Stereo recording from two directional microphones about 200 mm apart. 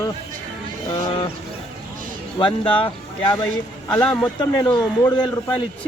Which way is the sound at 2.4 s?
25° left (ahead or behind).